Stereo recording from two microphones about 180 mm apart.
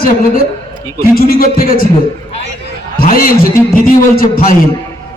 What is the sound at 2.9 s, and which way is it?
A man's voice, 55° left (ahead or behind).